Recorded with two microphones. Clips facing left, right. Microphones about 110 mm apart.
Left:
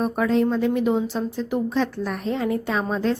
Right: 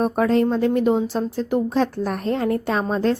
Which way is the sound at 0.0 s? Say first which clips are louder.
Right 2 dB; 45° right (ahead or behind).